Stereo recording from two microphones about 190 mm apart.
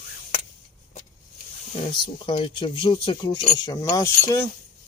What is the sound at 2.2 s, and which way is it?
Speech, 25° left (ahead or behind).